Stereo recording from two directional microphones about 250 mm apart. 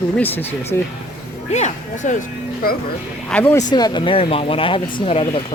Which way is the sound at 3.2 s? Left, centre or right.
Centre.